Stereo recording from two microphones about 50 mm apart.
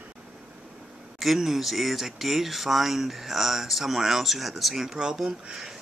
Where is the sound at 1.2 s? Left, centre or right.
Centre.